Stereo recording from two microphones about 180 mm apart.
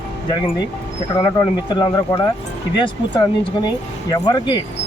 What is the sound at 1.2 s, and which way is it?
Speech, 25° left (ahead or behind).